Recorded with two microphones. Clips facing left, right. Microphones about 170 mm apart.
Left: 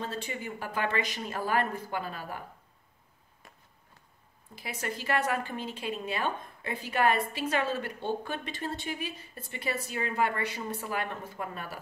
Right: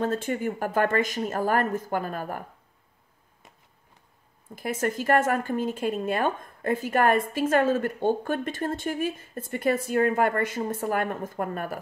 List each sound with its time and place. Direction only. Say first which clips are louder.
0.0 s a woman's voice: right 10 dB; 50° right (ahead or behind)
3.4 s a sound: right 1 dB; 20° right (ahead or behind)
4.6 s a woman's voice: right 9 dB; 50° right (ahead or behind)